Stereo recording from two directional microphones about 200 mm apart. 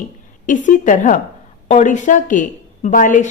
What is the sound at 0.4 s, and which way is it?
A woman's voice, 40° left (ahead or behind).